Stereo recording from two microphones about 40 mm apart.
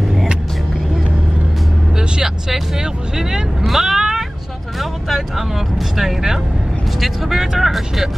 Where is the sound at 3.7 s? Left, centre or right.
Centre.